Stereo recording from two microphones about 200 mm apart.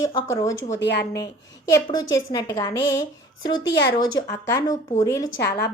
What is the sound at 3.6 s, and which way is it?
Speech, 60° left (ahead or behind).